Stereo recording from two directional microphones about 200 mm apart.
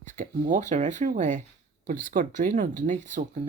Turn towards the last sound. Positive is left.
turn(degrees=-40)  # may be behind; listen again after turning